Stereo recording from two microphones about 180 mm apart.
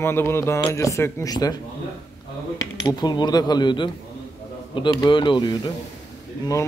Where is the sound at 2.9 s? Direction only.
25° left (ahead or behind).